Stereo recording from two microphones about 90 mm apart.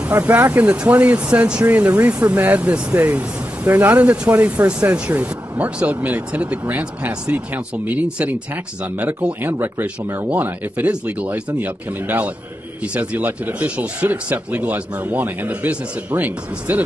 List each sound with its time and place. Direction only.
0.1 s speech: 15° right (ahead or behind)